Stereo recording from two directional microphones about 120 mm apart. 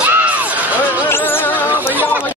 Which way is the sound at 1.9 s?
15° right (ahead or behind).